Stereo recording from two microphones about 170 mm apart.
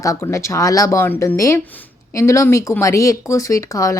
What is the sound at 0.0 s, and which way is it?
Speech, 20° left (ahead or behind).